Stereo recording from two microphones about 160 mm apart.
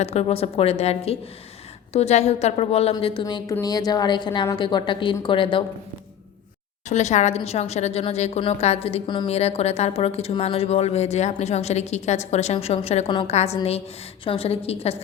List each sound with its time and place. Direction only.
0.0 s a woman's voice: 40° left (ahead or behind)
2.9 s a woman's voice: 30° left (ahead or behind)
6.8 s a woman's voice: 45° left (ahead or behind)